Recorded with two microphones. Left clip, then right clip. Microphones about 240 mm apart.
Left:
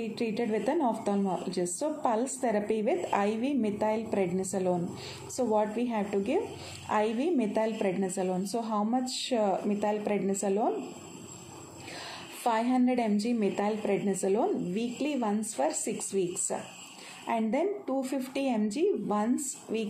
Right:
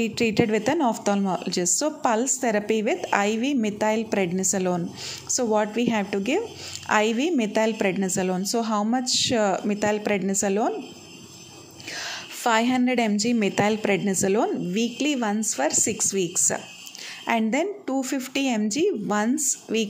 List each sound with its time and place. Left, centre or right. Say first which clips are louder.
0.0 s a woman's voice: right 9 dB; right
12.0 s a woman's voice: right 6 dB; right